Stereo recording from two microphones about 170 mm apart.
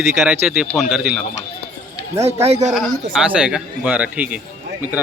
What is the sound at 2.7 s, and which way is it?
Speech, 5° right (ahead or behind).